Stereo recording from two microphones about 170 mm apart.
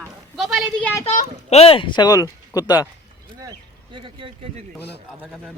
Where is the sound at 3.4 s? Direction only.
25° right (ahead or behind).